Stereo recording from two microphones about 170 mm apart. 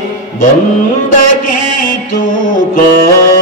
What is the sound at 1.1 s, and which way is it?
Music, 60° left (ahead or behind).